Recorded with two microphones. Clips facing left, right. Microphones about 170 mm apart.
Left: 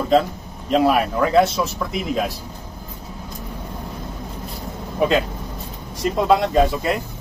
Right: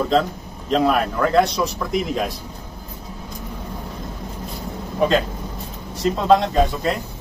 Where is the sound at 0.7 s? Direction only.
5° left (ahead or behind).